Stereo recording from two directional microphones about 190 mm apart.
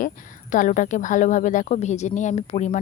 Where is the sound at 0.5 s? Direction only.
40° left (ahead or behind).